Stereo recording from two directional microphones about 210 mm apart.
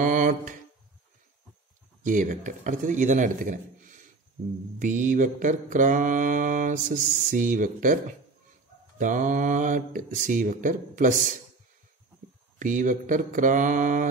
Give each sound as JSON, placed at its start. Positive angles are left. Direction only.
{"t": 0.0, "sound": "mantra", "side_deg": -40}
{"t": 2.0, "sound": "mantra", "side_deg": -40}
{"t": 4.7, "sound": "mantra", "side_deg": -40}
{"t": 12.5, "sound": "mantra", "side_deg": -40}